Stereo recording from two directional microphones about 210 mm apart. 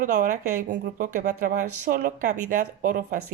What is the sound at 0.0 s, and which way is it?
Speech, 40° right (ahead or behind).